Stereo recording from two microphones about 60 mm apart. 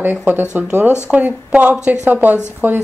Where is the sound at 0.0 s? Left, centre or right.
Right.